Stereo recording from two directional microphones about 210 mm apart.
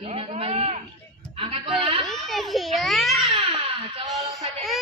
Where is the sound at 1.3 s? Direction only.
25° right (ahead or behind).